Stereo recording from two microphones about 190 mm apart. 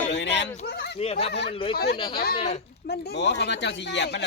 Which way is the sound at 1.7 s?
55° left (ahead or behind).